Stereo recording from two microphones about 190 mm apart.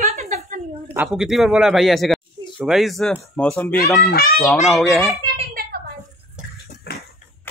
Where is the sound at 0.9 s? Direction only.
5° right (ahead or behind).